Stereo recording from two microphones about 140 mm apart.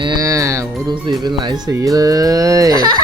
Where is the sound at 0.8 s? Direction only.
30° right (ahead or behind).